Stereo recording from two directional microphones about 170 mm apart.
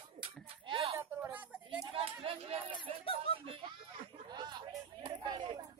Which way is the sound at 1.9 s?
35° right (ahead or behind).